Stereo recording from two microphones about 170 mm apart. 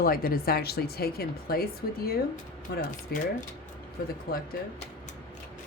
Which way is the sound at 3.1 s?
65° left (ahead or behind).